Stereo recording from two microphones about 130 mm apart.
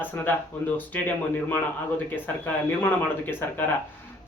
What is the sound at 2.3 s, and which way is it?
A man's voice, 15° left (ahead or behind).